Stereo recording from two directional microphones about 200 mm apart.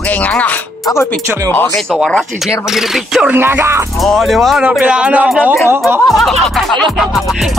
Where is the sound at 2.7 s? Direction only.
5° right (ahead or behind).